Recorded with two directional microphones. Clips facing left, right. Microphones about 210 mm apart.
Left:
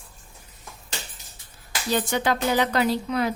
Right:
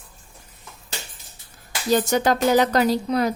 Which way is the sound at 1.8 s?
40° right (ahead or behind).